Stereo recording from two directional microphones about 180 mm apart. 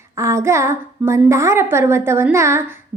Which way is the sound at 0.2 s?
15° right (ahead or behind).